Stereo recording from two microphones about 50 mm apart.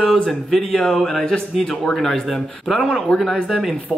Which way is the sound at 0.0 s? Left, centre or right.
Centre.